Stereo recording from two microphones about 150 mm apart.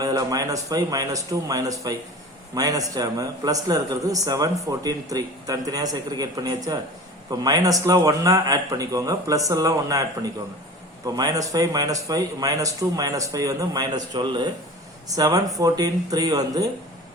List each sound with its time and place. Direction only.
0.0 s a man's voice: 25° right (ahead or behind)